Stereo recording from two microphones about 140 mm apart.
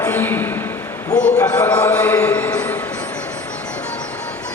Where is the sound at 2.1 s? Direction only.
10° left (ahead or behind).